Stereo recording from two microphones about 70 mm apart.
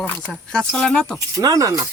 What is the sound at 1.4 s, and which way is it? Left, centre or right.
Speech, right.